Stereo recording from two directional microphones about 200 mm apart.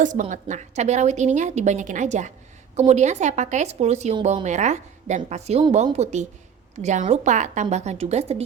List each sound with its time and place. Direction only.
0.0 s a woman's voice: 40° right (ahead or behind)